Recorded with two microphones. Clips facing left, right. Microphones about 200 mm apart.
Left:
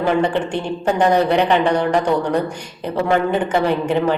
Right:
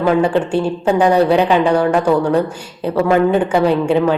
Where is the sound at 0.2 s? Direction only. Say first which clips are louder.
Right 4 dB; 10° right (ahead or behind).